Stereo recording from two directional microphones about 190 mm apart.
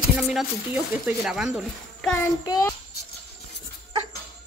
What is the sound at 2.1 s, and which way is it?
Jingle bell, 15° left (ahead or behind).